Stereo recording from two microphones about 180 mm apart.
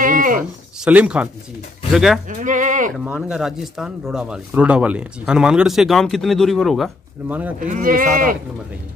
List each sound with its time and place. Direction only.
0.0 s a sound: 50° right (ahead or behind)
0.4 s speech: 5° right (ahead or behind)
2.3 s speech: 45° right (ahead or behind)
2.9 s speech: 5° right (ahead or behind)
7.2 s speech: 10° right (ahead or behind)
7.6 s speech: 45° right (ahead or behind)